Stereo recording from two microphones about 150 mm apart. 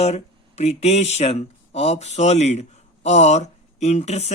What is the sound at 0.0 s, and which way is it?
Speech, 45° left (ahead or behind).